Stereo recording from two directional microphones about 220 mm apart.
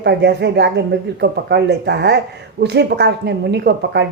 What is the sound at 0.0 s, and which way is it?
Speech, 50° right (ahead or behind).